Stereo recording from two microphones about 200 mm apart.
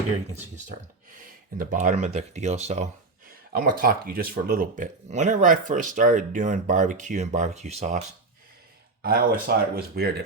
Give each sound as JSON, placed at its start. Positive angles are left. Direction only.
{"t": 1.2, "sound": "speech", "side_deg": -40}
{"t": 9.0, "sound": "speech", "side_deg": -45}